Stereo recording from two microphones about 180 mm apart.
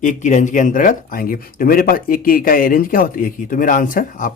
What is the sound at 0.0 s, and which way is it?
Speech, 45° left (ahead or behind).